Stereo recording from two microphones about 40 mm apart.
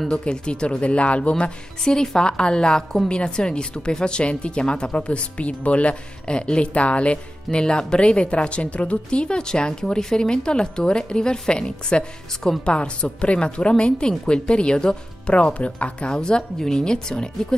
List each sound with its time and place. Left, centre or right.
0.1 s speech: left
1.9 s speech: centre